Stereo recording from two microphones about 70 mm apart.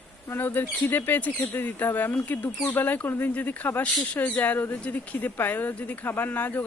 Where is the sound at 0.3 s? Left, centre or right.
Left.